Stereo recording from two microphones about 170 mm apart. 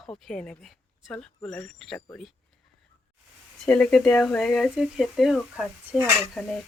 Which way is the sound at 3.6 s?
5° left (ahead or behind).